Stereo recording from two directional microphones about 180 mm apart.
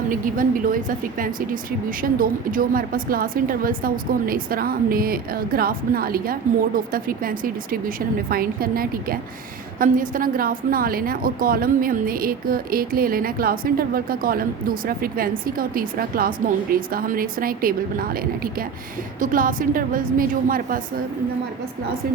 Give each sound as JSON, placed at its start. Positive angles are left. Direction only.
{"t": 0.1, "sound": "a woman's voice", "side_deg": -50}